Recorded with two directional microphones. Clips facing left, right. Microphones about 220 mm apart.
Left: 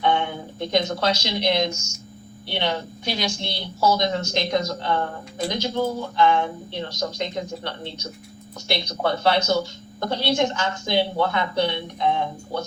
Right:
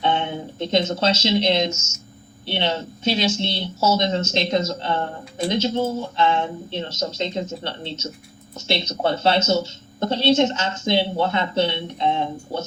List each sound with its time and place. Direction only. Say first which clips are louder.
0.0 s speech: even; 20° right (ahead or behind)